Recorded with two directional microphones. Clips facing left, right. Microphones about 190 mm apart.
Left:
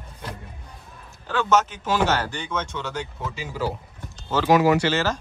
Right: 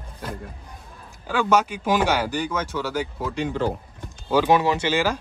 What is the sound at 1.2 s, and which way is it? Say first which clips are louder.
Speech: right 1 dB; 10° right (ahead or behind).